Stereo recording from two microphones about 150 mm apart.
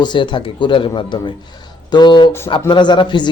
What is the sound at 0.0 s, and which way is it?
A man's voice, 30° left (ahead or behind).